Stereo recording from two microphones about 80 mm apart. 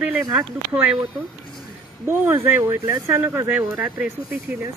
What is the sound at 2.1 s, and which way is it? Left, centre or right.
Speech, right.